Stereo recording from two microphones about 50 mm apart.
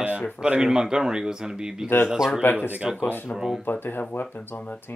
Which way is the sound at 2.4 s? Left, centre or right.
Left.